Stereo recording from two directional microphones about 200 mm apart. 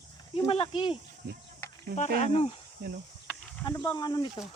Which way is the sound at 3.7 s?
20° left (ahead or behind).